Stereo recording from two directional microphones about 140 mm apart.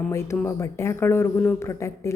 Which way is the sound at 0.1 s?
20° left (ahead or behind).